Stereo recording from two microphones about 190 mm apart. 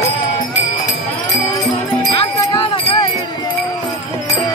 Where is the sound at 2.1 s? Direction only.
25° left (ahead or behind).